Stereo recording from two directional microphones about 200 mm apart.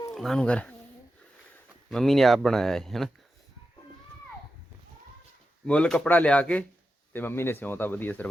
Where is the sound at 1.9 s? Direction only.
Centre (ahead or behind).